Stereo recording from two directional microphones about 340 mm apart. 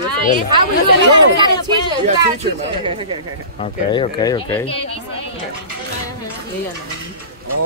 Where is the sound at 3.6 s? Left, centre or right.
Centre.